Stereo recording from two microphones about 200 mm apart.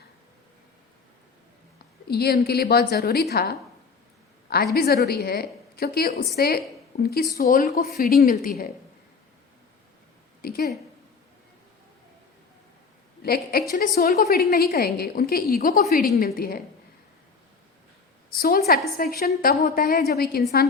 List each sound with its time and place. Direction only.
2.0 s a woman's voice: 55° left (ahead or behind)
4.7 s a woman's voice: 50° left (ahead or behind)
10.4 s a woman's voice: 50° left (ahead or behind)
13.2 s a woman's voice: 50° left (ahead or behind)
18.3 s a woman's voice: 45° left (ahead or behind)